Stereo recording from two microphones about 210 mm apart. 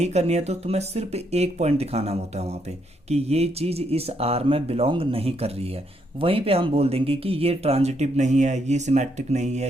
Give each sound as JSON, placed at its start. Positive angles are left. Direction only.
{"t": 0.0, "sound": "speech", "side_deg": -30}